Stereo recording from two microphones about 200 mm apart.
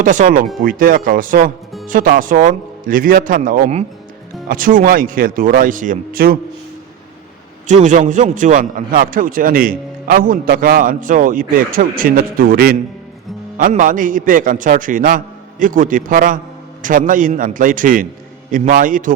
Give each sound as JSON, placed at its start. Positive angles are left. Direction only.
{"t": 0.0, "sound": "a man's voice", "side_deg": -40}
{"t": 7.7, "sound": "a man's voice", "side_deg": -40}